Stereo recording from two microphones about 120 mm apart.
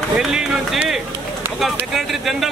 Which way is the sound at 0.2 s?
5° right (ahead or behind).